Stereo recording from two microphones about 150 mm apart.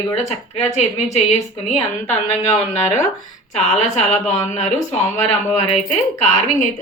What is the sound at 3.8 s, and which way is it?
Speech, 50° left (ahead or behind).